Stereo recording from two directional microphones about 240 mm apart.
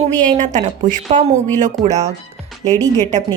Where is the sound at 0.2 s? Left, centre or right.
Right.